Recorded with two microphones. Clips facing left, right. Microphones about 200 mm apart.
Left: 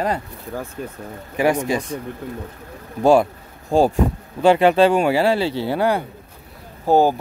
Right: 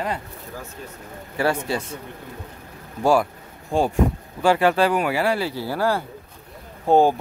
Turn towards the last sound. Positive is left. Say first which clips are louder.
# left 1 dB
turn(degrees=5)  # may be behind; listen again after turning